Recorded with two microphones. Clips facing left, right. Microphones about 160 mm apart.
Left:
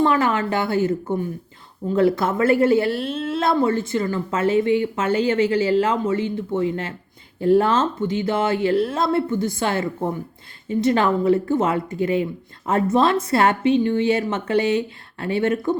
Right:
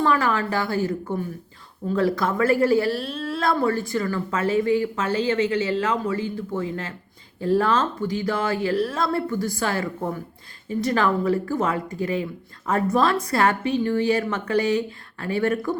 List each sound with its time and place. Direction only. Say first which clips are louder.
0.0 s speech: left 3 dB; 25° left (ahead or behind)
5.0 s speech: left 4 dB; 30° right (ahead or behind)
5.5 s speech: left 4 dB; 30° left (ahead or behind)